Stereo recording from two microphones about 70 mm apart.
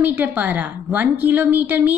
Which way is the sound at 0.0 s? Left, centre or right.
Right.